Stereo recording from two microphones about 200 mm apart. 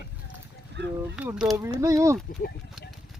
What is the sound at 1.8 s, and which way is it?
Speech, 15° right (ahead or behind).